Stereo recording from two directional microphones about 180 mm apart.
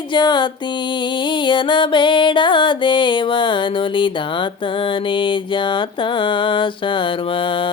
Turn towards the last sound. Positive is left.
turn(degrees=30)  # may be behind; listen again after turning